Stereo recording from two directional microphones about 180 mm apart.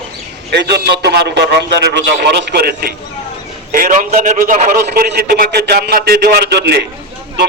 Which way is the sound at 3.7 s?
50° right (ahead or behind).